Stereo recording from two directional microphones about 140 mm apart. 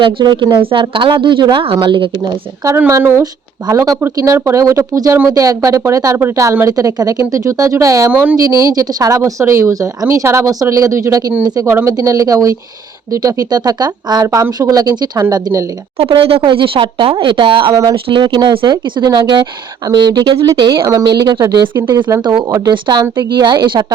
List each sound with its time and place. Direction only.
0.0 s speech: 35° right (ahead or behind)
2.2 s speech: 20° right (ahead or behind)
16.0 s speech: 40° right (ahead or behind)